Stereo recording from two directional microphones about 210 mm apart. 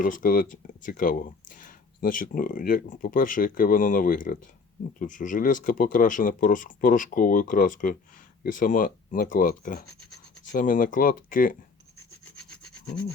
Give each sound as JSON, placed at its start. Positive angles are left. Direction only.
{"t": 0.0, "sound": "speech", "side_deg": 40}